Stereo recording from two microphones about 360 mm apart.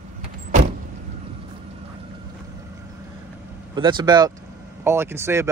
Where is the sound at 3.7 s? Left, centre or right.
Centre.